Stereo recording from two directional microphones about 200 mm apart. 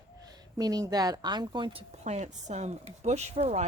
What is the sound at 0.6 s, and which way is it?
A woman's voice, 20° right (ahead or behind).